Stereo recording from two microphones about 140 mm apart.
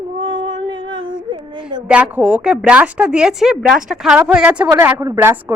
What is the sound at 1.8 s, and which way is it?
A woman's voice, 10° right (ahead or behind).